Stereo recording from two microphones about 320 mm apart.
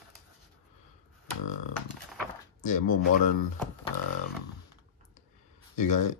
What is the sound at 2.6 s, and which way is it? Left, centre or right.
Speech, left.